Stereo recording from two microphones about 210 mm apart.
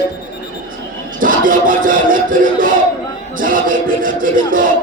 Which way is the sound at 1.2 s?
40° right (ahead or behind).